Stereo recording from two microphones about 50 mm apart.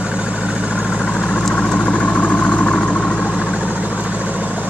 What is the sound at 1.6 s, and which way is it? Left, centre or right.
Vehicle, left.